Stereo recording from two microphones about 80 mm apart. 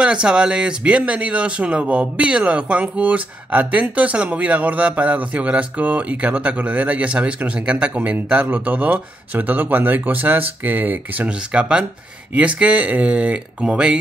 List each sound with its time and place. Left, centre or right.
0.0 s speech: centre